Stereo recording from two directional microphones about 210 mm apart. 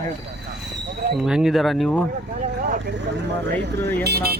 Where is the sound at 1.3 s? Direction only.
Centre (ahead or behind).